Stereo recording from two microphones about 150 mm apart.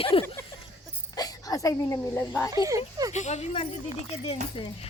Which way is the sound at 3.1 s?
50° left (ahead or behind).